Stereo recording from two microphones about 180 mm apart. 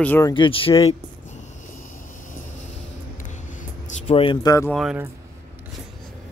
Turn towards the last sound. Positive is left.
turn(degrees=0)  # may be behind; listen again after turning